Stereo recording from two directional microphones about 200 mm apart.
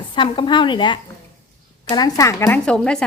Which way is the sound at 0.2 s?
25° left (ahead or behind).